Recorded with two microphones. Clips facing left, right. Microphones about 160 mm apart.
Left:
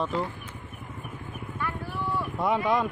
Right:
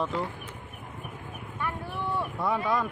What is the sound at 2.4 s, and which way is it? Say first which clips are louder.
Speech: left 4 dB; 20° left (ahead or behind).